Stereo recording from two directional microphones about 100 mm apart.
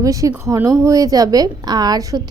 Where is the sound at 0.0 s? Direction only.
35° right (ahead or behind).